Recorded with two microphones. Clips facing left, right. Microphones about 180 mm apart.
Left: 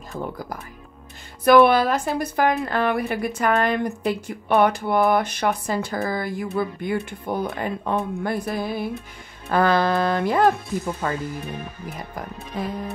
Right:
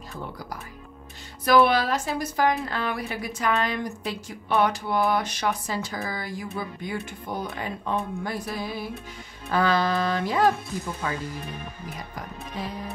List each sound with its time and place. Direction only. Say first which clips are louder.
0.1 s a woman's voice: left 6 dB; 50° left (ahead or behind)
12.6 s speech: left 5 dB; 55° left (ahead or behind)